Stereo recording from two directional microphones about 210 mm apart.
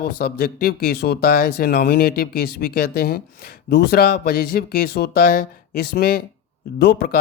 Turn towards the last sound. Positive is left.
turn(degrees=50)  # may be behind; listen again after turning